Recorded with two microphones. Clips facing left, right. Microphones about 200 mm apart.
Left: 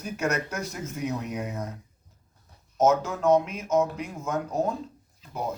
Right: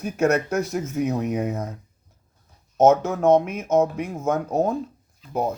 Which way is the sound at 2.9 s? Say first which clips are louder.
Right 4 dB; 60° right (ahead or behind).